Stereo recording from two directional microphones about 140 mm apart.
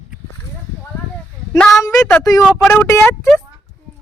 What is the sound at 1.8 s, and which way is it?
Speech, 25° left (ahead or behind).